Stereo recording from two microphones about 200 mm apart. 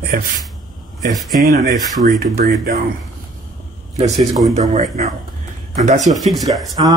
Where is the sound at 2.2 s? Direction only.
35° right (ahead or behind).